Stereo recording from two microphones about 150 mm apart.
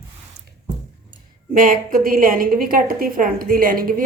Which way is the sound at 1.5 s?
65° right (ahead or behind).